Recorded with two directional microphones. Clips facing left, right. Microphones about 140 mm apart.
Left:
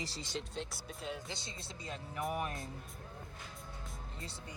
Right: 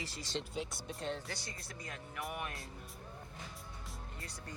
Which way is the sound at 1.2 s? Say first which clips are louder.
Even; 20° left (ahead or behind).